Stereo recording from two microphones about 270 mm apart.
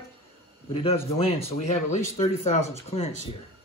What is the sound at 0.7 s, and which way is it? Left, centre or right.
Speech, left.